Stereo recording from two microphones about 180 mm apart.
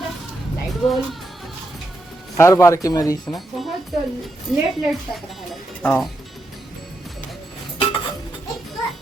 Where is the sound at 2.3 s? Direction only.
15° left (ahead or behind).